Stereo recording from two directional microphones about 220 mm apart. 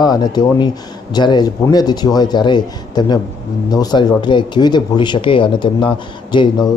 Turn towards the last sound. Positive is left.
turn(degrees=20)  # may be behind; listen again after turning